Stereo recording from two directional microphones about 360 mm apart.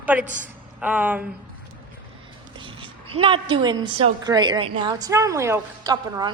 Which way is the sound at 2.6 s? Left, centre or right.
Centre.